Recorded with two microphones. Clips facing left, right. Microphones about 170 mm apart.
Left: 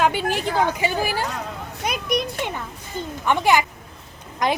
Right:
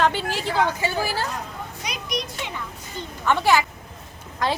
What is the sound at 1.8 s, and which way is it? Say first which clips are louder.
Speech: left 7 dB; 55° left (ahead or behind).